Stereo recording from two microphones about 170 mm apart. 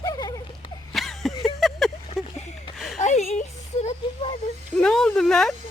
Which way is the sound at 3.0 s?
40° left (ahead or behind).